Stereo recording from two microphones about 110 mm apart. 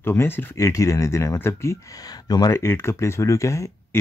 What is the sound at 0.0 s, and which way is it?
Speech, 20° left (ahead or behind).